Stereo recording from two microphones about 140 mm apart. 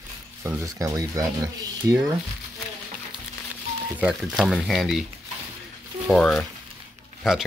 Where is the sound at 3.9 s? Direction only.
5° right (ahead or behind).